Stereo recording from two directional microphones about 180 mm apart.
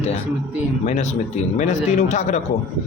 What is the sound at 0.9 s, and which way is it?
A man's voice, 40° left (ahead or behind).